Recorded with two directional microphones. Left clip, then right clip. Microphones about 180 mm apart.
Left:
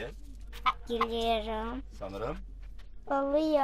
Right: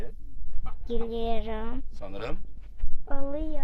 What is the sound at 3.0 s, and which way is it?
Speech, 15° left (ahead or behind).